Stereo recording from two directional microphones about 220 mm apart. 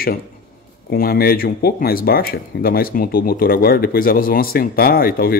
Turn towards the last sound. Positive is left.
turn(degrees=40)  # may be behind; listen again after turning